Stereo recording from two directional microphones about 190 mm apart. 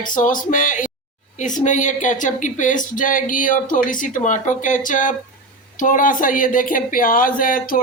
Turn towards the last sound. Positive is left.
turn(degrees=45)  # may be behind; listen again after turning